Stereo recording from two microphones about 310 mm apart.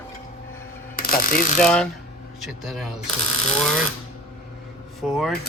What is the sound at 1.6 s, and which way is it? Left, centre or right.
Speech, centre.